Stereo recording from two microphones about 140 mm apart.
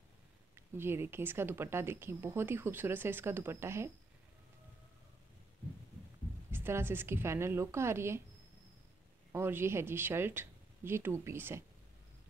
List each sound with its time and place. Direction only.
0.7 s speech: 15° right (ahead or behind)
6.5 s speech: 15° right (ahead or behind)
9.3 s speech: 15° right (ahead or behind)